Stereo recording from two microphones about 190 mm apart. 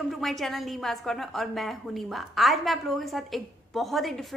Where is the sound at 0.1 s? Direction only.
Centre (ahead or behind).